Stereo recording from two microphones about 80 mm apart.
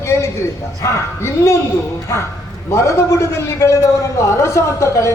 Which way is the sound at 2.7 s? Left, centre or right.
Left.